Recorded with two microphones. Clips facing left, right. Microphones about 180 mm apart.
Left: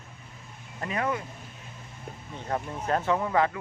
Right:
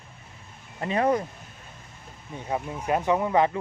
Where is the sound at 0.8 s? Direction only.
30° right (ahead or behind).